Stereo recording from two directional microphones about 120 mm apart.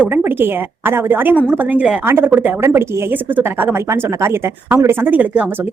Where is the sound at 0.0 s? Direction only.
15° right (ahead or behind).